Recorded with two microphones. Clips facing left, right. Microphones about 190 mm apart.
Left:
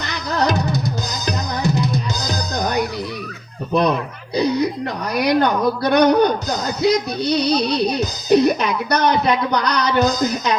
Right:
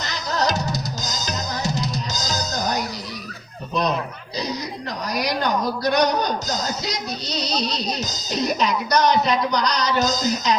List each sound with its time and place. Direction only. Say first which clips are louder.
0.1 s drum: left 4 dB; 60° left (ahead or behind)
3.7 s a man's voice: left 5 dB; 60° left (ahead or behind)